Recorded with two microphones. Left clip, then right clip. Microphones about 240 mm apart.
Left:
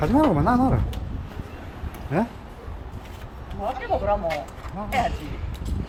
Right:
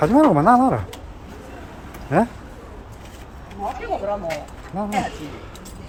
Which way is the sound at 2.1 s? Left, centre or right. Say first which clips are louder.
Right 7 dB; centre.